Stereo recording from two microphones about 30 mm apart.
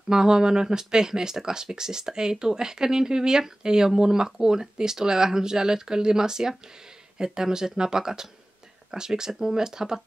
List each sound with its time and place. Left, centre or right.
0.1 s speech: right